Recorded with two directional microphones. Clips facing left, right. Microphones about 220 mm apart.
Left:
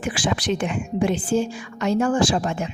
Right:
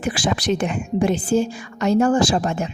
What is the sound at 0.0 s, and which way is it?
A woman's voice, 40° right (ahead or behind).